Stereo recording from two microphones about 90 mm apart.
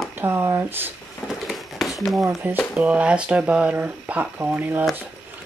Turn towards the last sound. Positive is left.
turn(degrees=-20)  # may be behind; listen again after turning